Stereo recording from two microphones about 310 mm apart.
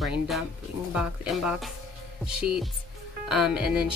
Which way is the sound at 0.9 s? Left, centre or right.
Centre.